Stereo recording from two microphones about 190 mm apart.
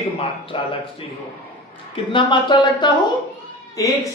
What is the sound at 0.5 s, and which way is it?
Speech, 25° left (ahead or behind).